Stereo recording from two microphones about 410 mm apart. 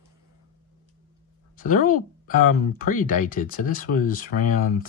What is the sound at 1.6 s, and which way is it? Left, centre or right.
Speech, centre.